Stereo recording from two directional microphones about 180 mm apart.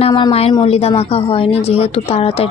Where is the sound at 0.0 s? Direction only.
30° left (ahead or behind).